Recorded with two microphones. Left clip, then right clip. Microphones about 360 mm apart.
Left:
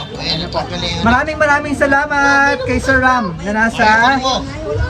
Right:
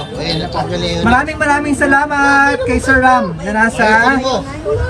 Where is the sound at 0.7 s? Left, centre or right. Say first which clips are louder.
Right 1 dB; centre.